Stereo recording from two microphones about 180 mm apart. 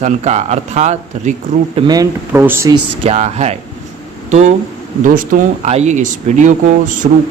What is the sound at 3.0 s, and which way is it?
Speech, 35° right (ahead or behind).